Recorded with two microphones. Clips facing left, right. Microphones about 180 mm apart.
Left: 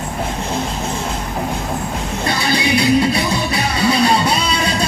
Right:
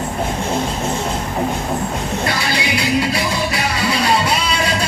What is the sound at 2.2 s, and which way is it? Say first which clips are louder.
Music: left 5 dB; 25° left (ahead or behind).